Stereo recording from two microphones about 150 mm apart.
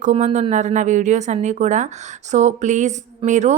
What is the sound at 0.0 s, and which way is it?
A woman's voice, 50° right (ahead or behind).